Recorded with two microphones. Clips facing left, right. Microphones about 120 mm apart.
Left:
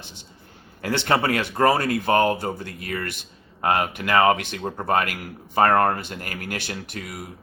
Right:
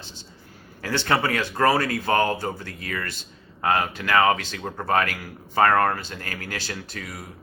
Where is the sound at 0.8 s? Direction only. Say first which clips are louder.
Left 2 dB; 20° left (ahead or behind).